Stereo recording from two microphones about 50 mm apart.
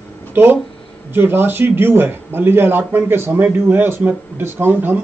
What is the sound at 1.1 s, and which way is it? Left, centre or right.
A man's voice, right.